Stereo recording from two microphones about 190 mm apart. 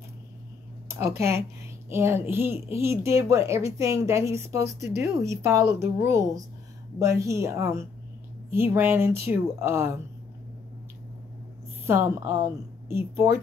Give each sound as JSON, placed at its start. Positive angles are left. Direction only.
{"t": 0.8, "sound": "a woman's voice", "side_deg": -15}
{"t": 11.8, "sound": "a woman's voice", "side_deg": -15}